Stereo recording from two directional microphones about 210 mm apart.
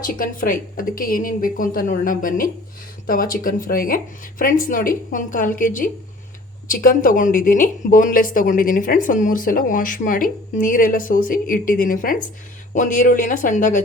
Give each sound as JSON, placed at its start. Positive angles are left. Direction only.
{"t": 0.0, "sound": "a woman's voice", "side_deg": 40}